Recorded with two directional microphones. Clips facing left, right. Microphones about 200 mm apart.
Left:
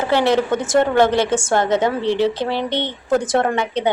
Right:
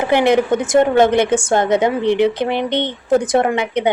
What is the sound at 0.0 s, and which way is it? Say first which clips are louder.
A woman's voice: right 3 dB; 15° right (ahead or behind).